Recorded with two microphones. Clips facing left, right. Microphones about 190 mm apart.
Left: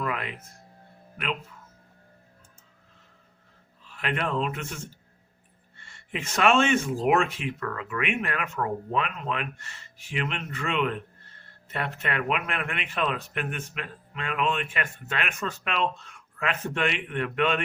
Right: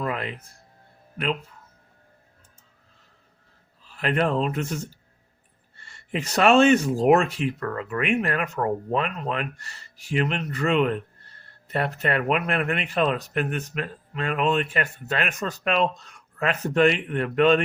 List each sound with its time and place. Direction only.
0.0 s music: 30° right (ahead or behind)
3.8 s speech: 35° right (ahead or behind)